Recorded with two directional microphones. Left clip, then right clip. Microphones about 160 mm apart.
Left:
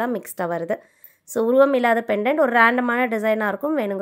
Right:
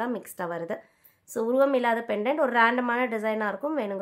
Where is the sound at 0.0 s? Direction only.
40° left (ahead or behind).